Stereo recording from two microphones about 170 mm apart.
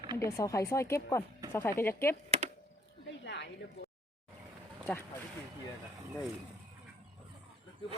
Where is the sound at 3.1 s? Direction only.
90° left.